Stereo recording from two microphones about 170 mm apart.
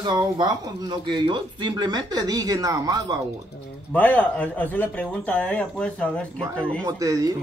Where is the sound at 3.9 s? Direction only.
10° left (ahead or behind).